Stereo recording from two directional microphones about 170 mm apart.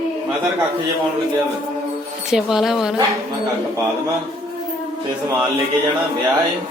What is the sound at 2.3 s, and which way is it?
Speech, centre (ahead or behind).